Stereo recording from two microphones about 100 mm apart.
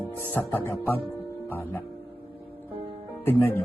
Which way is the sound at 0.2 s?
20° left (ahead or behind).